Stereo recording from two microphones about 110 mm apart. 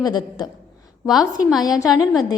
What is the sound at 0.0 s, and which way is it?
Speech, 40° left (ahead or behind).